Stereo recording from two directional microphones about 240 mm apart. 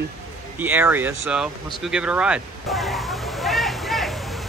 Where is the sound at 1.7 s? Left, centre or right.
Centre.